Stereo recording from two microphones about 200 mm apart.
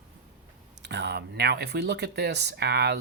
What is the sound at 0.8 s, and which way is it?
Speech, 60° right (ahead or behind).